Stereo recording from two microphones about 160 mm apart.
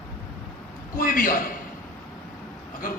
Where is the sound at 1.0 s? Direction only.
60° left (ahead or behind).